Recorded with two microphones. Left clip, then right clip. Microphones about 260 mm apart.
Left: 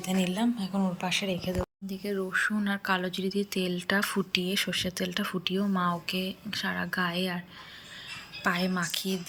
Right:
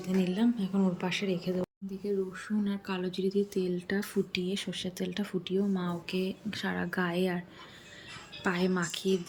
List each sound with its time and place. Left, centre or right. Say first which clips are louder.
0.0 s speech: left 1 dB; centre
8.4 s a woman's voice: left 2 dB; centre